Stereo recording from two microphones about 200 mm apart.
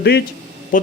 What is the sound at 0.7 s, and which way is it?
Speech, 40° left (ahead or behind).